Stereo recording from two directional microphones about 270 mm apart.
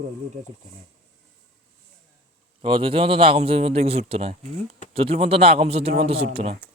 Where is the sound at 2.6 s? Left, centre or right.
Centre.